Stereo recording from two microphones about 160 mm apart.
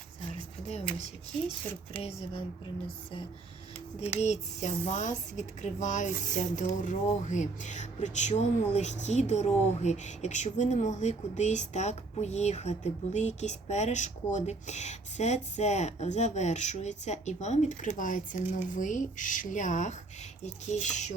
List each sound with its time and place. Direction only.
2.0 s speech: 40° left (ahead or behind)
4.0 s speech: 45° left (ahead or behind)